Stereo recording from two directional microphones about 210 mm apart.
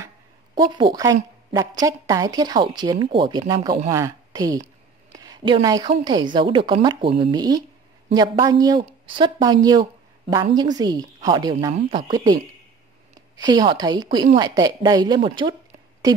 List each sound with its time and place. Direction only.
0.7 s a woman's voice: 20° right (ahead or behind)
13.4 s a woman's voice: 20° right (ahead or behind)